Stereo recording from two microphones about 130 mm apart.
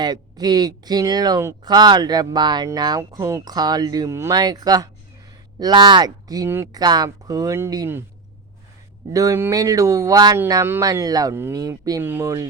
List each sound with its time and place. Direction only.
0.0 s speech: 30° right (ahead or behind)
9.1 s speech: 25° right (ahead or behind)